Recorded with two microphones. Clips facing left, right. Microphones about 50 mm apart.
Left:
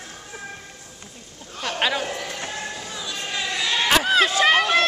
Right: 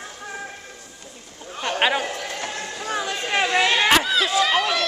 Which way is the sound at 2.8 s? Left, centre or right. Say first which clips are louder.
Right 6 dB; right.